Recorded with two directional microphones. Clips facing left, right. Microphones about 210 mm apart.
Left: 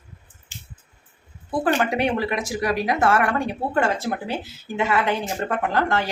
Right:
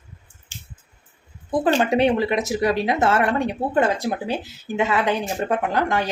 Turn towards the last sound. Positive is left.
turn(degrees=-15)  # may be behind; listen again after turning